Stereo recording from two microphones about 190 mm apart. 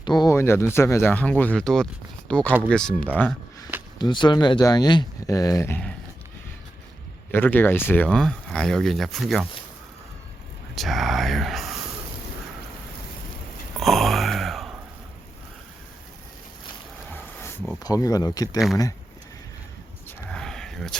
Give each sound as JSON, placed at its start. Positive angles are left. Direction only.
{"t": 0.0, "sound": "speech", "side_deg": 20}
{"t": 3.9, "sound": "speech", "side_deg": 25}
{"t": 7.3, "sound": "speech", "side_deg": 10}
{"t": 10.8, "sound": "speech", "side_deg": 0}
{"t": 13.7, "sound": "a sound", "side_deg": 0}
{"t": 17.8, "sound": "speech", "side_deg": 20}
{"t": 20.1, "sound": "a sound", "side_deg": 5}